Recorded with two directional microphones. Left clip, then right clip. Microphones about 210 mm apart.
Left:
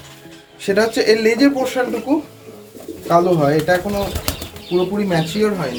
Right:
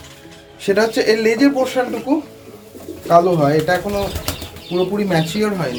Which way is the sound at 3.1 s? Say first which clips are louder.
Right 1 dB; 20° right (ahead or behind).